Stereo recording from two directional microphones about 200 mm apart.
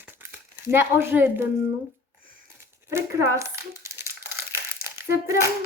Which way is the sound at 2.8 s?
15° right (ahead or behind).